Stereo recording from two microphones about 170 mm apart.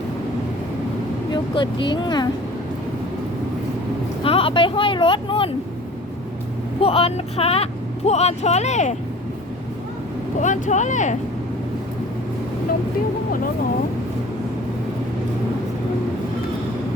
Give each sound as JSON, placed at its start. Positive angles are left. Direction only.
{"t": 1.3, "sound": "speech", "side_deg": 25}
{"t": 4.2, "sound": "speech", "side_deg": 30}
{"t": 6.8, "sound": "speech", "side_deg": 35}
{"t": 10.4, "sound": "speech", "side_deg": 45}